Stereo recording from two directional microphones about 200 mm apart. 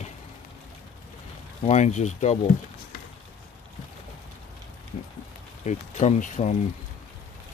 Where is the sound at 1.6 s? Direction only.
35° left (ahead or behind).